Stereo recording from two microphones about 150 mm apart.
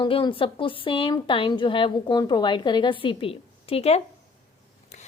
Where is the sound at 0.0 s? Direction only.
35° left (ahead or behind).